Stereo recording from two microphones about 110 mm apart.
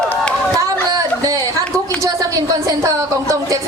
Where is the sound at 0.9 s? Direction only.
30° right (ahead or behind).